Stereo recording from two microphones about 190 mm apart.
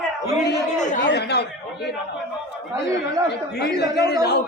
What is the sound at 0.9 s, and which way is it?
Speech, 65° left (ahead or behind).